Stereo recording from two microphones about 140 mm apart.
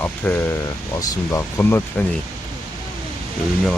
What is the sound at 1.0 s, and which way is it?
Speech, 25° left (ahead or behind).